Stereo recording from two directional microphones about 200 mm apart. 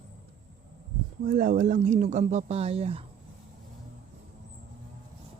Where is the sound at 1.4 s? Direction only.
40° right (ahead or behind).